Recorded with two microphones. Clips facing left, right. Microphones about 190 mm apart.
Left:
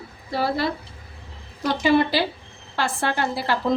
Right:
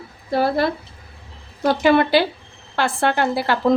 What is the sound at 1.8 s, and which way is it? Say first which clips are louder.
A woman's voice: right 3 dB; 60° right (ahead or behind).